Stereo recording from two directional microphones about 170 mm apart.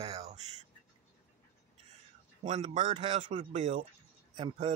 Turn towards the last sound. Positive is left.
turn(degrees=-30)  # may be behind; listen again after turning